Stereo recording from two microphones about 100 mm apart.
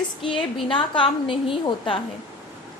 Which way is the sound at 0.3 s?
60° left (ahead or behind).